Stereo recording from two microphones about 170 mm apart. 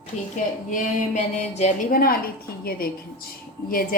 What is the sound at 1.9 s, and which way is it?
A woman's voice, 60° left (ahead or behind).